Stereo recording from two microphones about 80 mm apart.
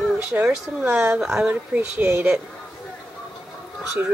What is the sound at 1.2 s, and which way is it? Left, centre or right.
Speech, centre.